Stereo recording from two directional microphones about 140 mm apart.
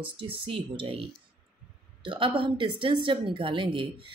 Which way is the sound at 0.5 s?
40° right (ahead or behind).